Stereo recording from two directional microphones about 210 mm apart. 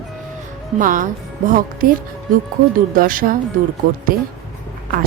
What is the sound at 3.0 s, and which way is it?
Speech, 40° right (ahead or behind).